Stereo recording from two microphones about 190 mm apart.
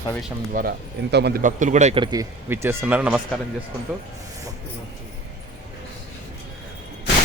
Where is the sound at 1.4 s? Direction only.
40° right (ahead or behind).